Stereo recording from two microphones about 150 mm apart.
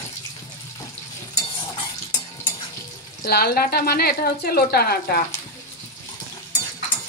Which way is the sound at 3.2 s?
90° left.